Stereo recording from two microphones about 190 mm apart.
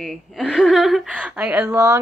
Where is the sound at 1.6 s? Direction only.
15° right (ahead or behind).